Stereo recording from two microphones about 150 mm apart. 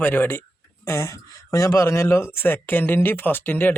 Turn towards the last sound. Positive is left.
turn(degrees=15)  # may be behind; listen again after turning